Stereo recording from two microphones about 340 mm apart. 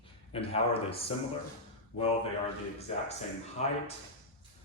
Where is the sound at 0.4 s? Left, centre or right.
Centre.